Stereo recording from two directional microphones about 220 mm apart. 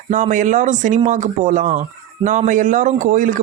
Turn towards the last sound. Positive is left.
turn(degrees=-35)  # may be behind; listen again after turning